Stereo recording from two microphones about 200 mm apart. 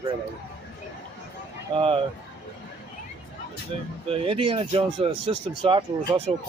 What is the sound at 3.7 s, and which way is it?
Speech, 30° right (ahead or behind).